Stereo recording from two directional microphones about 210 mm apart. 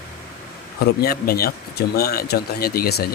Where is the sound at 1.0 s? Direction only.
45° left (ahead or behind).